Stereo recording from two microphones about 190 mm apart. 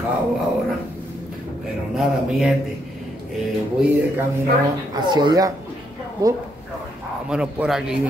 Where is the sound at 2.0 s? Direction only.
Centre (ahead or behind).